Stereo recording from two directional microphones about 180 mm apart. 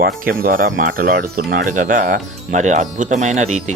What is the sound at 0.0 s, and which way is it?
Speech, 50° right (ahead or behind).